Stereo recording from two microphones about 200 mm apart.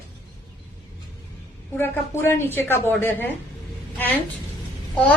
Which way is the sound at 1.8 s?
10° left (ahead or behind).